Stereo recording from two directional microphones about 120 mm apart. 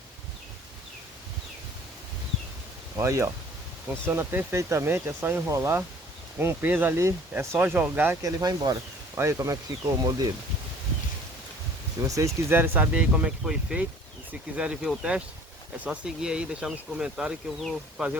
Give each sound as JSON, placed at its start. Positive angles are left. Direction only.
{"t": 2.9, "sound": "speech", "side_deg": -25}
{"t": 8.2, "sound": "speech", "side_deg": -30}
{"t": 12.0, "sound": "speech", "side_deg": -25}